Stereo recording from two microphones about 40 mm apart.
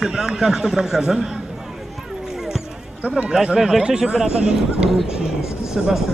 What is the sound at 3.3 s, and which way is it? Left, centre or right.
A man's voice, centre.